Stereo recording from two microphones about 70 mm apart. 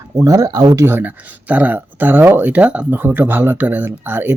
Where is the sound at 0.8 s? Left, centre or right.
Right.